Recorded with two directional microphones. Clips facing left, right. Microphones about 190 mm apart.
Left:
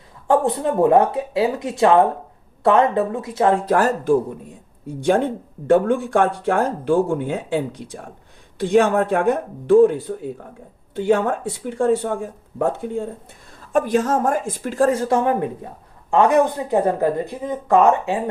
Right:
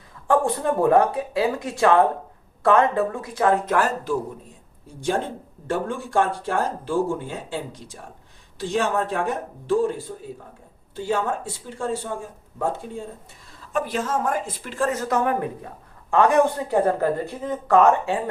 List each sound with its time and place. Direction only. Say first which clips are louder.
0.3 s speech: left 2 dB; 20° left (ahead or behind); by 4.2 s 45° left (ahead or behind)
4.9 s speech: left 7 dB; 60° left (ahead or behind)
13.7 s speech: left 6 dB; 45° left (ahead or behind); by 18.2 s 20° left (ahead or behind)